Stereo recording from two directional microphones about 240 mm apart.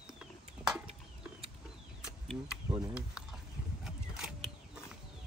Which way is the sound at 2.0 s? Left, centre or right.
Centre.